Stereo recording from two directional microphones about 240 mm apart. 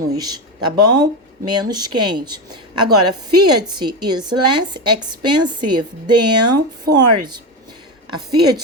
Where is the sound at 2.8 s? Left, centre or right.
Right.